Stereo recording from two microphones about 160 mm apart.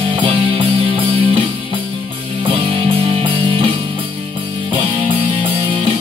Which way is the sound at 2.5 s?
35° right (ahead or behind).